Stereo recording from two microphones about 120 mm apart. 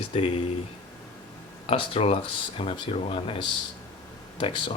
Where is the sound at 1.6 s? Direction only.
55° left (ahead or behind).